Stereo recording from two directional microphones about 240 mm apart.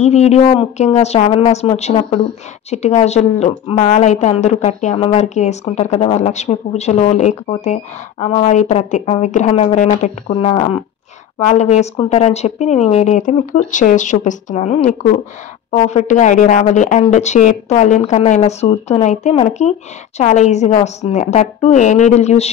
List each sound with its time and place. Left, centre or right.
0.0 s a woman's voice: left